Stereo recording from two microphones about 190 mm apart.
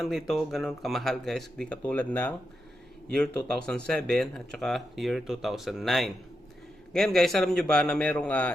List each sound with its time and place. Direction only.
0.0 s speech: centre (ahead or behind)